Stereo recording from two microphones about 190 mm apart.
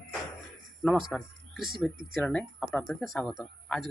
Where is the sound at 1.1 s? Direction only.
Centre (ahead or behind).